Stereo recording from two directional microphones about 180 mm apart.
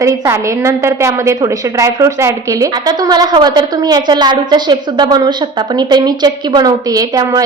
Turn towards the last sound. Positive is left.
turn(degrees=-20)  # may be behind; listen again after turning